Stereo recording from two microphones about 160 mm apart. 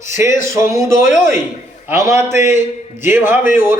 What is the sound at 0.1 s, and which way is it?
A man's voice, 15° right (ahead or behind).